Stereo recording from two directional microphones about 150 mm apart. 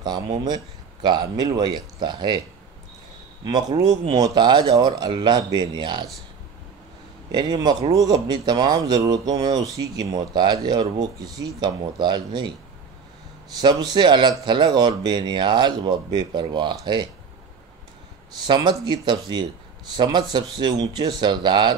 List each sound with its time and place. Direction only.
1.0 s speech: 30° right (ahead or behind)
3.4 s speech: 30° right (ahead or behind)
7.3 s speech: 30° right (ahead or behind)
13.6 s speech: 30° right (ahead or behind)
18.5 s speech: 30° right (ahead or behind)